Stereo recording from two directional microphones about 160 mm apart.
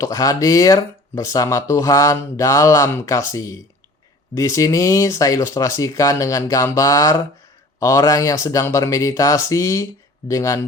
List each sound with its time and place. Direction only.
0.0 s speech: 20° left (ahead or behind)